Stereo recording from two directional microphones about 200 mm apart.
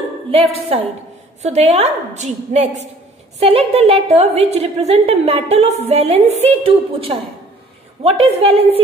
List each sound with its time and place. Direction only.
0.3 s a woman's voice: 30° right (ahead or behind)